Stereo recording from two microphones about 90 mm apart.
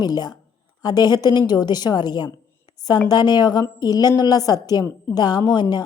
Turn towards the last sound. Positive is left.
turn(degrees=55)  # may be behind; listen again after turning